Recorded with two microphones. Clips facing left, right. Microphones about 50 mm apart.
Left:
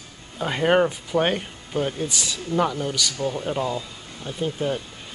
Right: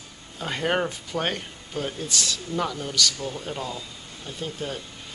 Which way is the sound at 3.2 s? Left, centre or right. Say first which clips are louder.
Left 6 dB; left.